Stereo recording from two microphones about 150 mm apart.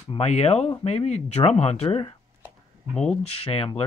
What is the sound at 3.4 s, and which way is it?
Speech, 40° left (ahead or behind).